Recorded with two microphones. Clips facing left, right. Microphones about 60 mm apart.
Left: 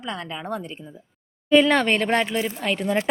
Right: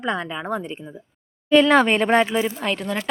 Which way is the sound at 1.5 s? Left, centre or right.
Centre.